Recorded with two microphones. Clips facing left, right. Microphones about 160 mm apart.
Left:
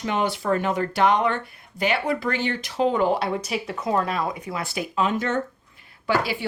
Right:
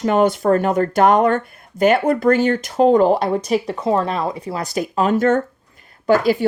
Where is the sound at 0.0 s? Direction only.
45° right (ahead or behind).